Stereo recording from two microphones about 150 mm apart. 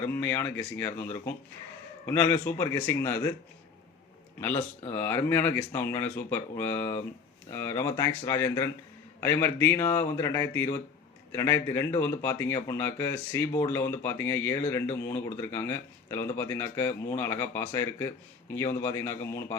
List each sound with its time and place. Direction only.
0.1 s speech: 10° left (ahead or behind)
2.0 s speech: 10° left (ahead or behind)
4.9 s speech: 15° left (ahead or behind)